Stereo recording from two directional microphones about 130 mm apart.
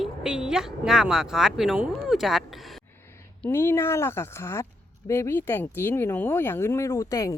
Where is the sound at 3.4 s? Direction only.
20° left (ahead or behind).